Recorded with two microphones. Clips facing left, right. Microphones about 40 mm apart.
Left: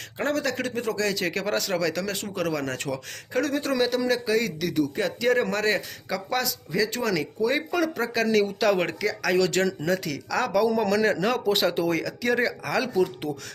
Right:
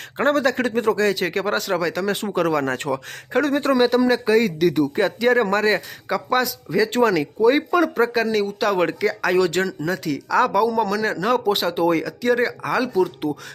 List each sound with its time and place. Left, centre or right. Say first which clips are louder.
0.2 s a man's voice: right 7 dB; right
1.2 s speech: right 4 dB; centre
2.3 s a man's voice: right 7 dB; right
8.1 s speech: right 2 dB; centre
9.0 s speech: right 2 dB; right
9.6 s speech: right 2 dB; centre
10.8 s speech: right 1 dB; centre